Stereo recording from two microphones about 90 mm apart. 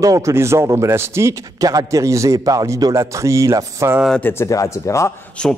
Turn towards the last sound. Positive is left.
turn(degrees=10)  # may be behind; listen again after turning